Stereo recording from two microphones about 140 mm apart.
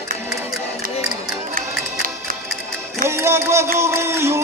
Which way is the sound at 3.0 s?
20° right (ahead or behind).